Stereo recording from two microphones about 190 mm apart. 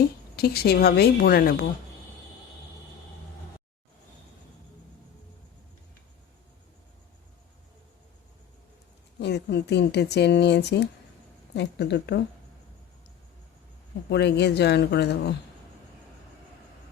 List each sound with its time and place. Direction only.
0.3 s speech: 55° left (ahead or behind)
9.1 s speech: 60° left (ahead or behind)
14.1 s speech: 65° left (ahead or behind)